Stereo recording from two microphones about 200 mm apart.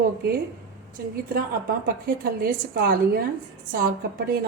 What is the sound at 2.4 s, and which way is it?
Speech, 50° right (ahead or behind).